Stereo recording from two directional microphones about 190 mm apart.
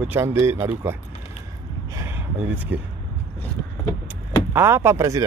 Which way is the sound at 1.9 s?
15° right (ahead or behind).